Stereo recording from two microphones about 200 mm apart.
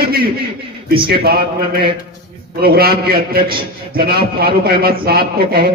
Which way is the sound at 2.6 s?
50° right (ahead or behind).